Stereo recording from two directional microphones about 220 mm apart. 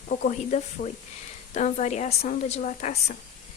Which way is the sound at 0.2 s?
35° left (ahead or behind).